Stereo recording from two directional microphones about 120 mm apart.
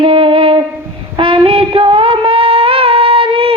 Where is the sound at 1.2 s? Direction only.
45° right (ahead or behind).